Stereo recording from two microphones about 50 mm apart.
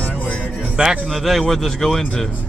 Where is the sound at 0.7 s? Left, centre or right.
Centre.